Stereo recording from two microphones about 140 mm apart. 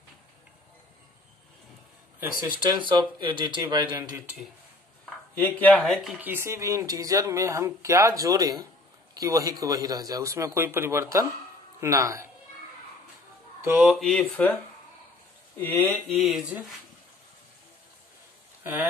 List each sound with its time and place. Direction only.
2.6 s speech: 35° right (ahead or behind)
5.4 s speech: 10° left (ahead or behind)
6.2 s speech: 15° right (ahead or behind)
13.6 s speech: 10° right (ahead or behind); by 16.0 s 15° left (ahead or behind)
16.1 s speech: centre (ahead or behind)
18.6 s speech: 15° right (ahead or behind)